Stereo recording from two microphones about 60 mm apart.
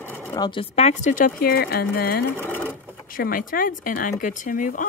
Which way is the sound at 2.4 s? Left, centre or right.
Left.